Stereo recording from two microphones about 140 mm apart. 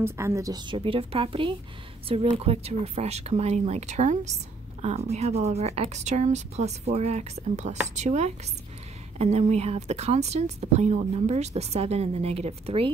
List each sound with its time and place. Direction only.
0.0 s a woman's voice: 20° right (ahead or behind); by 12.9 s 45° right (ahead or behind)